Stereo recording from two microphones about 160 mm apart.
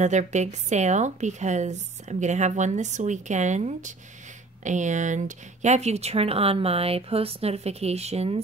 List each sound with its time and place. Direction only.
0.0 s a woman's voice: 50° right (ahead or behind)